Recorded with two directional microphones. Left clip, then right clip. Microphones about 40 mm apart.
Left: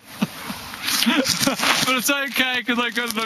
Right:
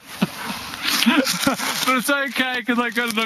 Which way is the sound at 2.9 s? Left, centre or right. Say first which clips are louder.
Right 2 dB; left.